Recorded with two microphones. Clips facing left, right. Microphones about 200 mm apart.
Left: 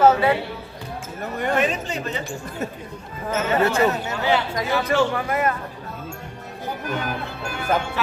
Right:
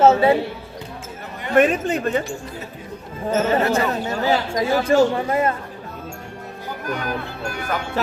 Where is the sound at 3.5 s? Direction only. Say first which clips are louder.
Even; 30° right (ahead or behind).